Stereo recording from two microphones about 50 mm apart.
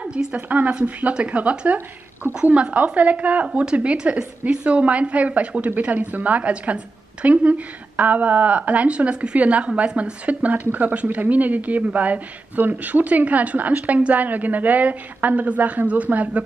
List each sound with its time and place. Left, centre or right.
0.0 s a woman's voice: right
3.4 s a woman's voice: centre